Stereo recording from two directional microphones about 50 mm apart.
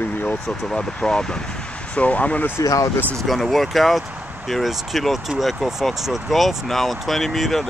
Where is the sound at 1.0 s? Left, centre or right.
Centre.